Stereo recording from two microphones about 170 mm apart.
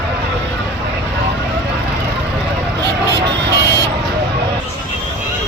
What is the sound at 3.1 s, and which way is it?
Vehicle, 90° right.